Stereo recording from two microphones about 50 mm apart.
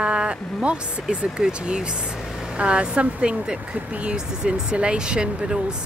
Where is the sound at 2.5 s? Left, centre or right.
Right.